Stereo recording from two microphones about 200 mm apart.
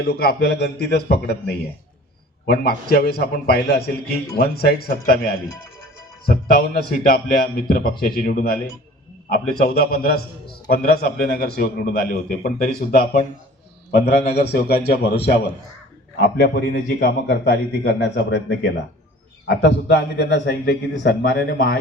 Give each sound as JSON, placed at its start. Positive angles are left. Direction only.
{"t": 0.0, "sound": "a man's voice", "side_deg": 50}
{"t": 2.5, "sound": "a man's voice", "side_deg": 50}
{"t": 14.3, "sound": "a man's voice", "side_deg": 55}